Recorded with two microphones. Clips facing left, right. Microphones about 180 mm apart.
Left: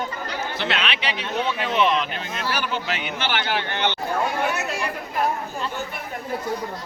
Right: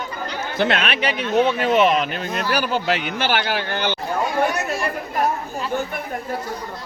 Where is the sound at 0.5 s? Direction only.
50° right (ahead or behind).